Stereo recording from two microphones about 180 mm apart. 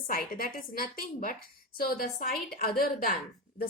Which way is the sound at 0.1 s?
50° left (ahead or behind).